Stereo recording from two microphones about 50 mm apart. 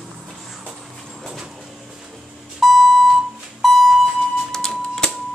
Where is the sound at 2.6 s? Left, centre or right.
Centre.